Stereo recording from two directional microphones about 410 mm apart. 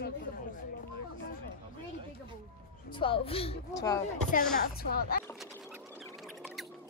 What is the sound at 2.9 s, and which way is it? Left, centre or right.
A woman's voice, centre.